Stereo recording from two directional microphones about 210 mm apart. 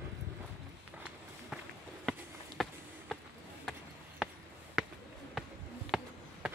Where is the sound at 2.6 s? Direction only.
Centre (ahead or behind).